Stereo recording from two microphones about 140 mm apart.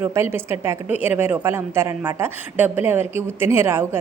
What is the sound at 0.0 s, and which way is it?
A woman's voice, 15° right (ahead or behind).